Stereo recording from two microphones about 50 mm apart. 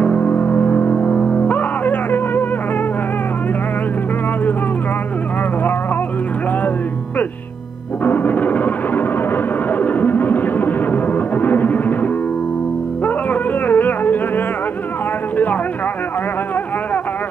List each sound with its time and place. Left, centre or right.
0.0 s music: left
8.0 s music: left
15.3 s a sound: left